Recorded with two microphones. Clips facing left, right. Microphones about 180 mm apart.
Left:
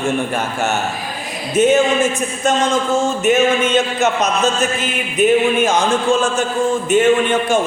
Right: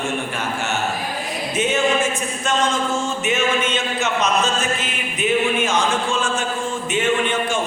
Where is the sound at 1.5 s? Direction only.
45° left (ahead or behind).